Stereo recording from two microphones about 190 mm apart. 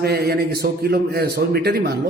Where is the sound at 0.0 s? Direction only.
55° right (ahead or behind).